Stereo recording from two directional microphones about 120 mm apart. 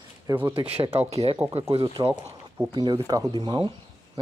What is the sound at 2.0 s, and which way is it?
Speech, 30° right (ahead or behind).